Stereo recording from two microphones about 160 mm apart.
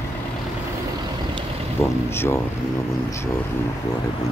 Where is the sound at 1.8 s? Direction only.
15° left (ahead or behind).